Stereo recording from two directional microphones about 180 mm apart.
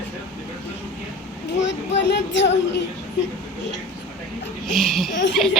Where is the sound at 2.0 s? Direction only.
80° left.